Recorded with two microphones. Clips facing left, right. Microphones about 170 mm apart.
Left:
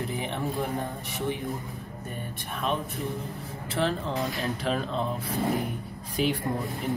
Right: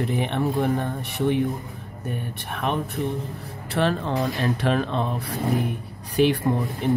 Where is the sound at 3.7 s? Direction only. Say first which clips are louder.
Right 5 dB; 65° right (ahead or behind).